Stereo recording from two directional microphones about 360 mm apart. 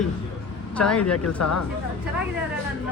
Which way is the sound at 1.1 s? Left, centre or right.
Left.